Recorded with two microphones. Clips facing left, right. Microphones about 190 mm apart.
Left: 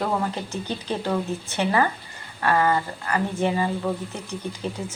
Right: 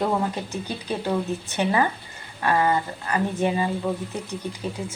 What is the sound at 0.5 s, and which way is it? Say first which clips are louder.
Speech: left 1 dB; 10° right (ahead or behind).